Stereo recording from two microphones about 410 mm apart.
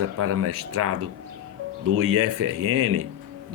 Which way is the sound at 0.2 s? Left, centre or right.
Right.